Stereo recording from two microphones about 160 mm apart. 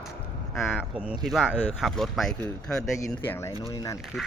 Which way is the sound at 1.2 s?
Centre (ahead or behind).